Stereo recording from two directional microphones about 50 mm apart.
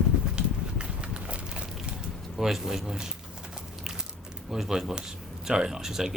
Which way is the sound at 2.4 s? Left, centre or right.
Centre.